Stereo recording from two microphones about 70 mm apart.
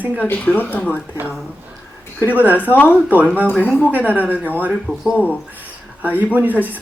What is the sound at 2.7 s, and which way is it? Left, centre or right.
Speech, left.